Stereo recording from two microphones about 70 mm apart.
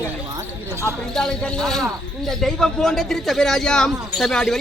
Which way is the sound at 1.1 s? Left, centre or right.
Centre.